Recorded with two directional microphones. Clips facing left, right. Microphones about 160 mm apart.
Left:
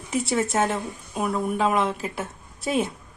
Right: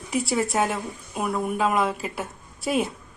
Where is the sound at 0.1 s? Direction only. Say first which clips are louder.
Even; centre (ahead or behind).